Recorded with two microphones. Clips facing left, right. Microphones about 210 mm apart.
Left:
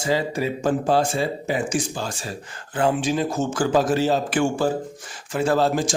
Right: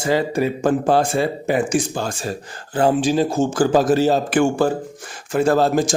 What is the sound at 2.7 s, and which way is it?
A man's voice, 35° right (ahead or behind).